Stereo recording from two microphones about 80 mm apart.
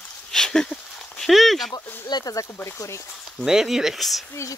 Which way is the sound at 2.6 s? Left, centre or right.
Left.